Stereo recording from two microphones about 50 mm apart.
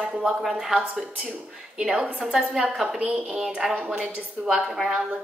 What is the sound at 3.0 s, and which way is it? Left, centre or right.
Speech, right.